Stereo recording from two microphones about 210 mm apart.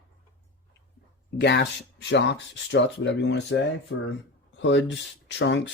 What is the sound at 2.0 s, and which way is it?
Speech, 55° left (ahead or behind).